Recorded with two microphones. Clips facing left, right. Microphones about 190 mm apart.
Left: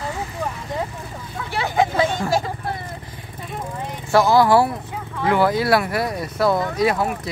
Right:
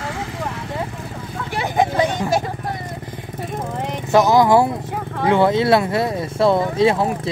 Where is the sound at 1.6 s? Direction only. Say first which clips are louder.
Right 1 dB; 15° right (ahead or behind).